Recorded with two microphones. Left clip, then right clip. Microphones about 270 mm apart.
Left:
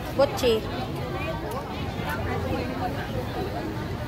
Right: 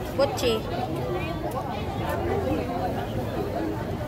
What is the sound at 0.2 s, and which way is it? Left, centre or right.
Speech, centre.